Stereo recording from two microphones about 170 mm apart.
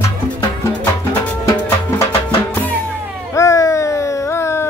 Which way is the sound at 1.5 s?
15° left (ahead or behind).